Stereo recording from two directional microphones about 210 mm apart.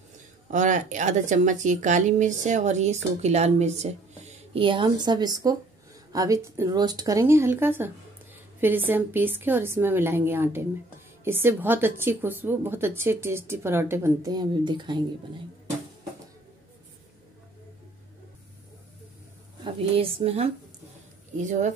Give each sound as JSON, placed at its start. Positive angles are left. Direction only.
{"t": 0.5, "sound": "a woman's voice", "side_deg": -35}
{"t": 19.6, "sound": "a woman's voice", "side_deg": -25}